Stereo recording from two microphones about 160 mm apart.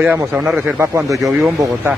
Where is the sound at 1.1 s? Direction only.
Centre (ahead or behind).